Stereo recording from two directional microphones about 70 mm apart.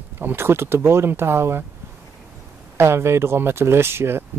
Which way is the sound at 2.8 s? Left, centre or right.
Right.